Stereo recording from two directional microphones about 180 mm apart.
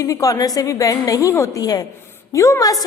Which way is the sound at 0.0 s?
20° left (ahead or behind).